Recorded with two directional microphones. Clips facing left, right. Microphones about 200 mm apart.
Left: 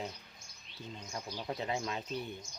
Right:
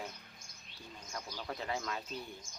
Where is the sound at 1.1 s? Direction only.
20° left (ahead or behind).